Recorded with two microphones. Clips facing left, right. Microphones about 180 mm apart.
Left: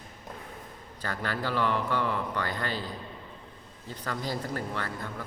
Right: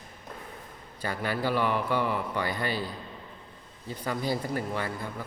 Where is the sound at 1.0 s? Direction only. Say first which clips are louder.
Right 3 dB; 10° right (ahead or behind).